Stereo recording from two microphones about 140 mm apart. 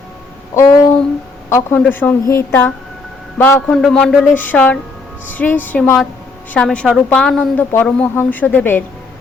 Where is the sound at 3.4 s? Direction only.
10° left (ahead or behind).